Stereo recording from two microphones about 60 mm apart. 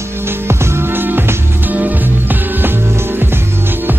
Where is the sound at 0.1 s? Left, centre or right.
Right.